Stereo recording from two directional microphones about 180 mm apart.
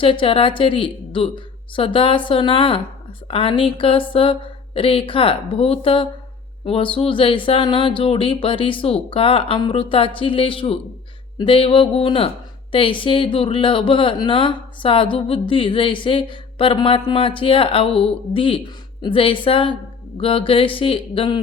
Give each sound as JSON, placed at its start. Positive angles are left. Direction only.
{"t": 0.0, "sound": "speech", "side_deg": 30}